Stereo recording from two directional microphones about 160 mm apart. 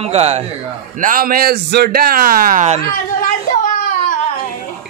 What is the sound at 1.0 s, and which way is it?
A man's voice, 60° right (ahead or behind).